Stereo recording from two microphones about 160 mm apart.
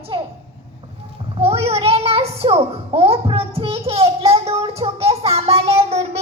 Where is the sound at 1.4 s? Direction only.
40° right (ahead or behind).